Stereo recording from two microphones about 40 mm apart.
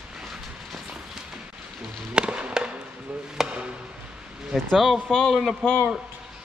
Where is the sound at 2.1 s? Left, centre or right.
Right.